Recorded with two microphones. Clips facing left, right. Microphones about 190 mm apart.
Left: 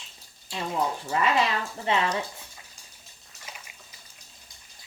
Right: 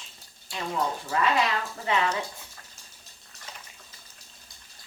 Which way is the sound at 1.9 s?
25° left (ahead or behind).